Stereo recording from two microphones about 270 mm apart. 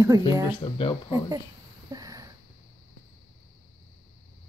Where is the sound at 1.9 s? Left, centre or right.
Centre.